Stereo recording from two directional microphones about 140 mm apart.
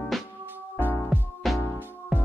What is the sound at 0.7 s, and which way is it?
Music, 15° left (ahead or behind).